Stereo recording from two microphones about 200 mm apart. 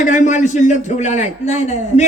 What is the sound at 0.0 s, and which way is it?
A man's voice, 40° left (ahead or behind).